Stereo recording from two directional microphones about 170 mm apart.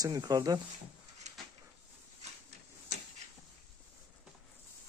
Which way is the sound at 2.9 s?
75° right (ahead or behind).